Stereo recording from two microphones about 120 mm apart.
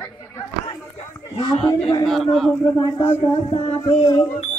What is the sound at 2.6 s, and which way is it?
Speech, 25° left (ahead or behind).